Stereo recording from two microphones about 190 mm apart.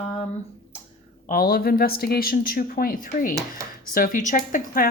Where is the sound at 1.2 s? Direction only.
50° left (ahead or behind).